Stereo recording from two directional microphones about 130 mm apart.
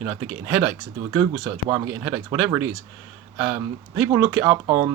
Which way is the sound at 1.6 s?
30° right (ahead or behind).